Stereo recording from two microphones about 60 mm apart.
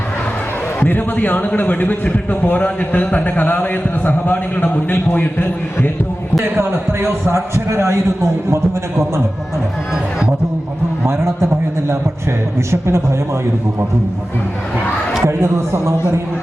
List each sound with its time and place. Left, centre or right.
0.8 s a man's voice: left
6.6 s a man's voice: right
11.0 s a man's voice: right
15.3 s a man's voice: right